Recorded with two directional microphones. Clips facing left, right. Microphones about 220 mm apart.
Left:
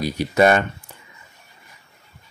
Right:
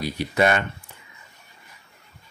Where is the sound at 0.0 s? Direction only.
40° left (ahead or behind).